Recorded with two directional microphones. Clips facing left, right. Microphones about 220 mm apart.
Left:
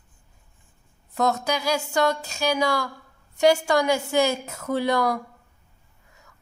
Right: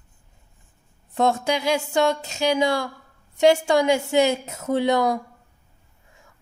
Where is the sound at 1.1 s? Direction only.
25° right (ahead or behind).